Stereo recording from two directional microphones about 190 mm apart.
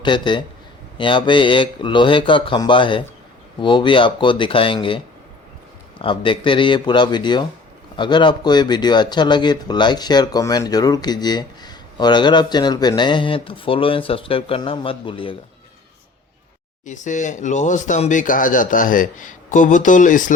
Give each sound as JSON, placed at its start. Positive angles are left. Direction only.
{"t": 0.0, "sound": "speech", "side_deg": 25}
{"t": 16.8, "sound": "speech", "side_deg": 40}